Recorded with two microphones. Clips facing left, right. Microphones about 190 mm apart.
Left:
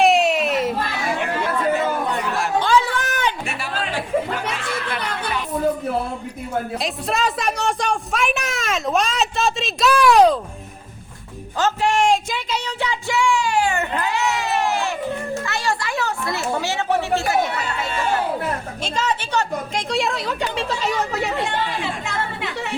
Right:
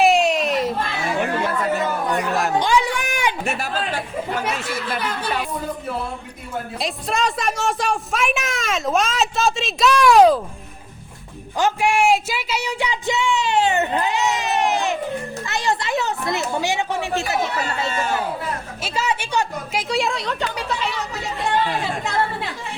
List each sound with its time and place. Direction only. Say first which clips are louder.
0.0 s a sound: even; centre (ahead or behind)
2.6 s a sound: left 4 dB; 15° right (ahead or behind)
3.4 s music: right 4 dB; 45° right (ahead or behind)
6.7 s a woman's voice: even; centre (ahead or behind)
11.5 s a sound: even; 10° right (ahead or behind)
15.4 s children playing: right 1 dB; 20° right (ahead or behind)
18.8 s a woman's voice: right 1 dB; 10° right (ahead or behind)
19.9 s a woman's voice: even; centre (ahead or behind)
20.8 s speech: left 4 dB; 45° left (ahead or behind)
21.1 s speech: left 5 dB; 65° left (ahead or behind)
21.8 s chatter: right 3 dB; 35° right (ahead or behind)